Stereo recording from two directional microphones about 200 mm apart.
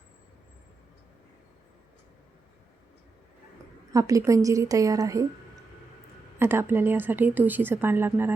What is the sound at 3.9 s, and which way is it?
A woman's voice, 15° right (ahead or behind).